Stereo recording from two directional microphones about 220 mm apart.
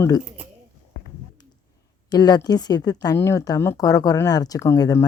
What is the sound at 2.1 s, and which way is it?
Speech, 20° left (ahead or behind).